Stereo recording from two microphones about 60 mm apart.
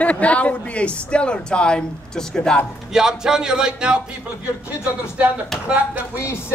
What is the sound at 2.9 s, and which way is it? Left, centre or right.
Speech, centre.